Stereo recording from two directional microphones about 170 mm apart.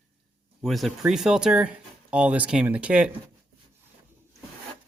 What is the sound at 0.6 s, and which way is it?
Speech, centre (ahead or behind).